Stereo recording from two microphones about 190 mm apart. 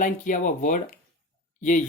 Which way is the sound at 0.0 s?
45° left (ahead or behind).